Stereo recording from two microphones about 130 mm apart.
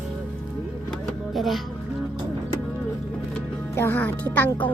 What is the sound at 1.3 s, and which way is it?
Speech, centre (ahead or behind).